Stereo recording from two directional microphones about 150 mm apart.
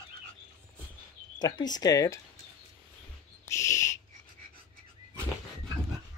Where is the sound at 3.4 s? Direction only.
20° left (ahead or behind).